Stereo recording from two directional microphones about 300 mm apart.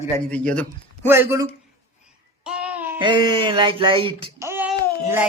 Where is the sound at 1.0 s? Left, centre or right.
Centre.